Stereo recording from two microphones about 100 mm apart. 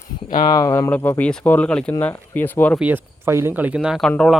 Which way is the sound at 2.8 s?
15° right (ahead or behind).